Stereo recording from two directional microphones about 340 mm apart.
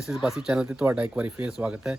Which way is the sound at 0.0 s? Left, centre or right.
Centre.